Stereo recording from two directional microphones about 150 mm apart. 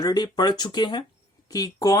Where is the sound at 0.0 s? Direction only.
25° left (ahead or behind).